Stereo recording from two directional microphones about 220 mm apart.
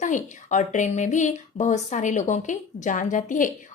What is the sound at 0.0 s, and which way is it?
Speech, 35° left (ahead or behind).